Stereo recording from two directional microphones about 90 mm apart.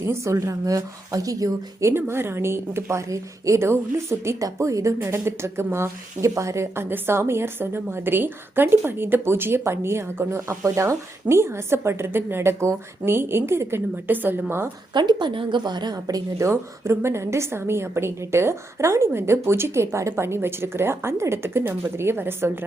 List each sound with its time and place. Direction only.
0.1 s speech: 35° right (ahead or behind)
14.9 s speech: 55° right (ahead or behind); by 22.5 s 25° right (ahead or behind)